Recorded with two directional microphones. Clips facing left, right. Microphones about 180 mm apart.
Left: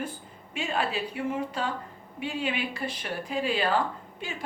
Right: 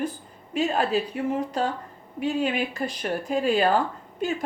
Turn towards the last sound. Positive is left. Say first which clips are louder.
# right 8 dB
turn(degrees=-45)  # may be behind; listen again after turning